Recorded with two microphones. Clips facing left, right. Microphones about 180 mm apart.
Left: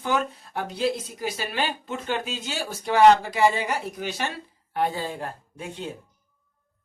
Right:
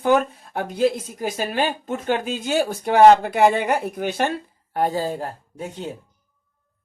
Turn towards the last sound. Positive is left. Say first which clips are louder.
# right 3 dB
turn(degrees=-40)  # may be behind; listen again after turning